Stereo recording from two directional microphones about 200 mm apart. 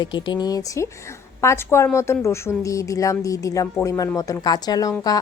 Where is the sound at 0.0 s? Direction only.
25° left (ahead or behind).